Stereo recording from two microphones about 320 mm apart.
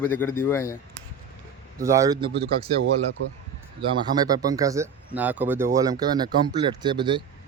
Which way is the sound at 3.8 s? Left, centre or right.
Centre.